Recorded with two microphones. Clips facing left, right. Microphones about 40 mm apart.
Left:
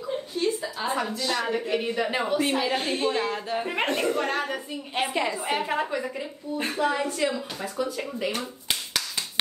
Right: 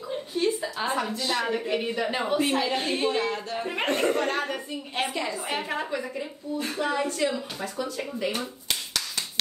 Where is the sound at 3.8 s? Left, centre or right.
Right.